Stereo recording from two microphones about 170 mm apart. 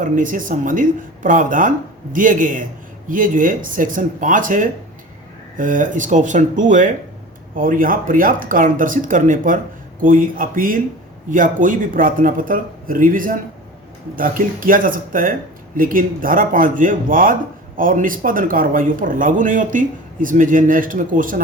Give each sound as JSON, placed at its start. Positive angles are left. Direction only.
{"t": 0.0, "sound": "speech", "side_deg": -50}